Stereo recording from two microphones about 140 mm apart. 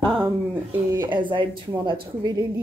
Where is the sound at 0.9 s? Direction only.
20° right (ahead or behind).